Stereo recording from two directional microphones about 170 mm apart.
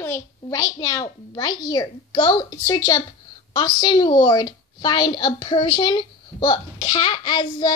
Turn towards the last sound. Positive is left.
turn(degrees=25)  # may be behind; listen again after turning